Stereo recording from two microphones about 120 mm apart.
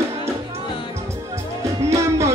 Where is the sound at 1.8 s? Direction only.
25° right (ahead or behind).